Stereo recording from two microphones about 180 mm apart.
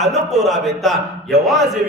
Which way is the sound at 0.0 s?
Centre (ahead or behind).